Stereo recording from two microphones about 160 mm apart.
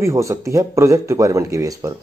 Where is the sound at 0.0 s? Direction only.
20° right (ahead or behind).